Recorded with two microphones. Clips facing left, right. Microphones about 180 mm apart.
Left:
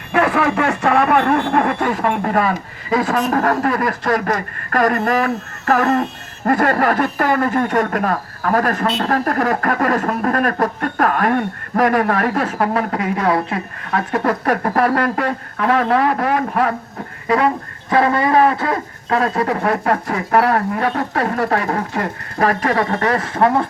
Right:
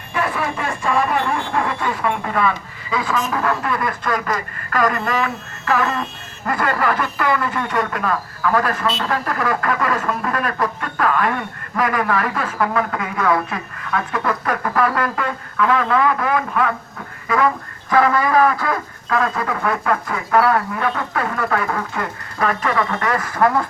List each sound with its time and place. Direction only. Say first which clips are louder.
0.1 s speech: left 7 dB; 70° left (ahead or behind); by 3.2 s 45° left (ahead or behind)
3.2 s speech: left 5 dB; 65° left (ahead or behind)
3.4 s speech: left 4 dB; 45° left (ahead or behind); by 23.6 s 25° left (ahead or behind)